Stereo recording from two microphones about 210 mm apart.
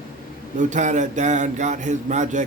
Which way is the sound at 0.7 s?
35° right (ahead or behind).